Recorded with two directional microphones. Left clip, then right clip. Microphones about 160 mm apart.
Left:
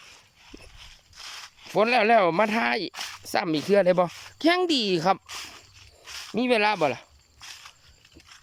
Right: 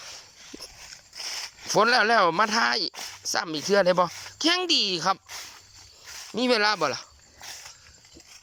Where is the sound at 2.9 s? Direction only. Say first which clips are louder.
Left 3 dB; 50° right (ahead or behind).